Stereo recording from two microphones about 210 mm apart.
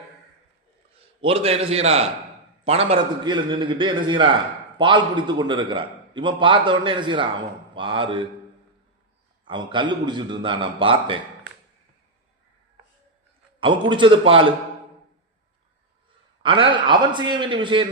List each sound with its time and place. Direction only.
1.2 s a man's voice: 25° right (ahead or behind)
9.5 s a man's voice: 20° right (ahead or behind)
13.6 s a man's voice: 25° right (ahead or behind)
16.4 s a man's voice: 25° right (ahead or behind)